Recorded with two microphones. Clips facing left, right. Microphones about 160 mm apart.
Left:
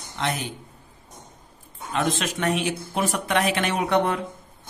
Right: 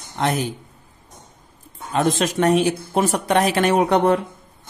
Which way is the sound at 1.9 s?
40° right (ahead or behind).